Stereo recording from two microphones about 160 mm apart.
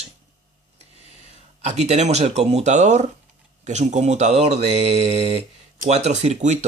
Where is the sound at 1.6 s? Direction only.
45° right (ahead or behind).